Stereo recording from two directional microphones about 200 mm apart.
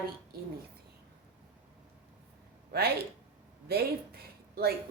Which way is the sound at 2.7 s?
55° right (ahead or behind).